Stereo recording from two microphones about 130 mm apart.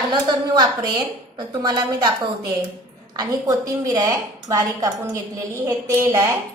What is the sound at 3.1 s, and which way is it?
A woman's voice, 30° right (ahead or behind).